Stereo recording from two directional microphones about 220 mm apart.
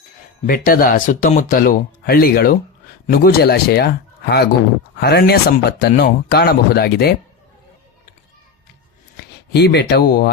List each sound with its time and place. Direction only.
0.4 s a man's voice: 40° left (ahead or behind)
4.9 s a man's voice: 45° left (ahead or behind)
9.5 s a man's voice: 50° left (ahead or behind)